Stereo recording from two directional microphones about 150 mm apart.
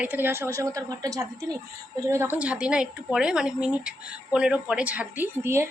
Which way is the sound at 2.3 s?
10° right (ahead or behind).